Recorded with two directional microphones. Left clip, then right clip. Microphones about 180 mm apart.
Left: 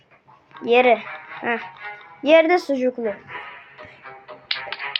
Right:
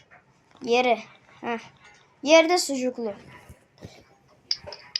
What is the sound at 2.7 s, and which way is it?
Speech, 5° right (ahead or behind).